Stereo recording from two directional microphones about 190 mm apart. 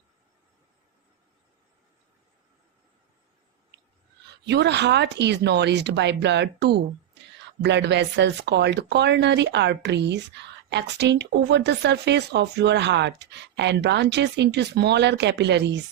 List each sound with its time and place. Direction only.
4.4 s speech: 65° right (ahead or behind)